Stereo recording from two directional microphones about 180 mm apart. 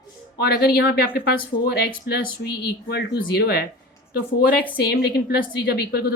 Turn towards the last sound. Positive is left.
turn(degrees=60)  # may be behind; listen again after turning